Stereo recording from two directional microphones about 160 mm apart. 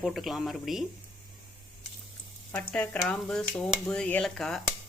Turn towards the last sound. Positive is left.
turn(degrees=5)  # may be behind; listen again after turning